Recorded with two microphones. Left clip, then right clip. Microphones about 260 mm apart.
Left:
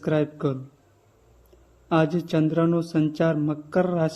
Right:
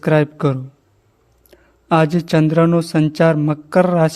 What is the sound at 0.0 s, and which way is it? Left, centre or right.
Speech, right.